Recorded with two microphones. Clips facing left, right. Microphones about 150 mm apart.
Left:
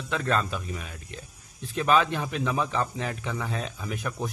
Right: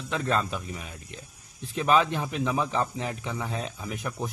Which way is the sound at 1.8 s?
20° right (ahead or behind).